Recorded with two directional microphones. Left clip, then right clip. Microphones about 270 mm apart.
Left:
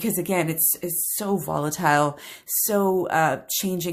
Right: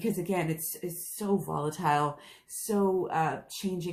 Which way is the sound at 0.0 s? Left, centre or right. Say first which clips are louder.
Left 6 dB; left.